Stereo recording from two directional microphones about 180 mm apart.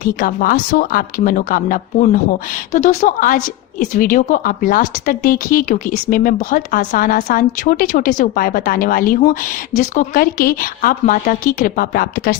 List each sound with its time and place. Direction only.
0.0 s a woman's voice: 50° left (ahead or behind)